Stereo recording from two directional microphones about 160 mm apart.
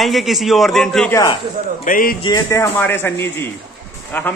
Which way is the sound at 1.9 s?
60° left (ahead or behind).